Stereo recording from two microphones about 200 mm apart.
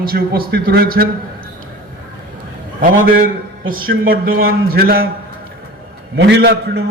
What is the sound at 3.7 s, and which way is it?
A man's voice, 45° right (ahead or behind).